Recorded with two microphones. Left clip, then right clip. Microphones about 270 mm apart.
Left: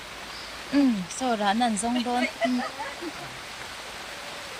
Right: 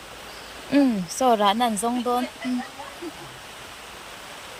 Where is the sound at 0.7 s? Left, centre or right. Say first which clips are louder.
Right 3 dB; centre.